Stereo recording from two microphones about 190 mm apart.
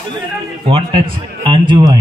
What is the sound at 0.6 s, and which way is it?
Speech, 30° right (ahead or behind).